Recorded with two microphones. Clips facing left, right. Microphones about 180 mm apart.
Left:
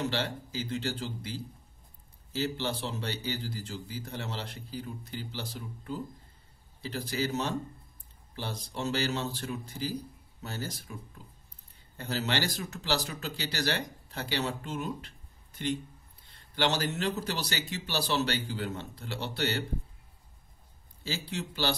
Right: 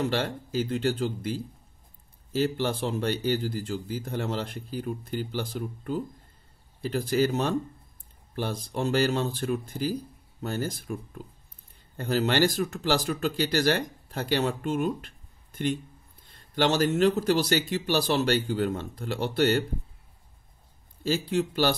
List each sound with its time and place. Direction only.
0.0 s speech: 50° right (ahead or behind)
21.0 s speech: 50° right (ahead or behind)